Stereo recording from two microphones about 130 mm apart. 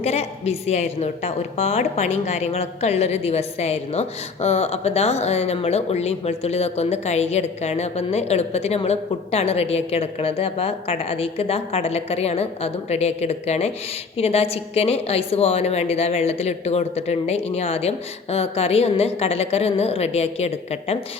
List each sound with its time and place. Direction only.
0.0 s a woman's voice: 55° left (ahead or behind)